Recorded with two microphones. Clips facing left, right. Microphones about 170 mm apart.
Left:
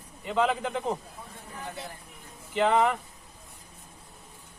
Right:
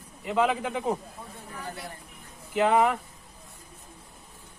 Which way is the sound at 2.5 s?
5° right (ahead or behind).